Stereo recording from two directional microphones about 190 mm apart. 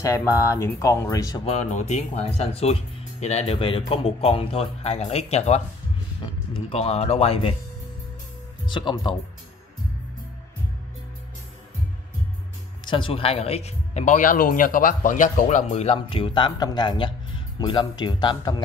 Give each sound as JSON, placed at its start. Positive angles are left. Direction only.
{"t": 0.0, "sound": "speech", "side_deg": 15}
{"t": 1.4, "sound": "speech", "side_deg": 35}
{"t": 6.7, "sound": "speech", "side_deg": 30}
{"t": 8.6, "sound": "speech", "side_deg": 25}
{"t": 12.8, "sound": "speech", "side_deg": 25}